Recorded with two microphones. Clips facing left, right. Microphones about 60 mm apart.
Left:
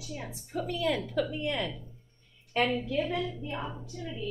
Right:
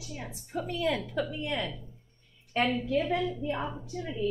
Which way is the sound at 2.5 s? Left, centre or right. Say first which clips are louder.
Right 1 dB; centre.